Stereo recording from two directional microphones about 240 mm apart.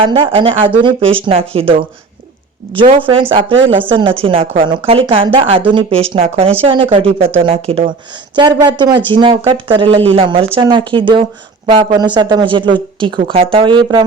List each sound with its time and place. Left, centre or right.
0.0 s speech: right